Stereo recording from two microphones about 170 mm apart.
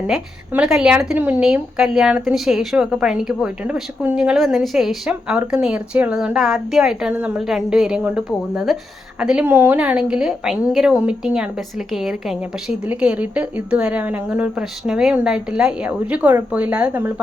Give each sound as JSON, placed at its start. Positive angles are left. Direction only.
{"t": 0.1, "sound": "a woman's voice", "side_deg": -5}